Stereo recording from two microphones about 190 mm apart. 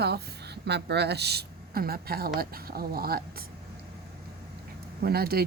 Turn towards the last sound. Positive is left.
turn(degrees=-55)  # may be behind; listen again after turning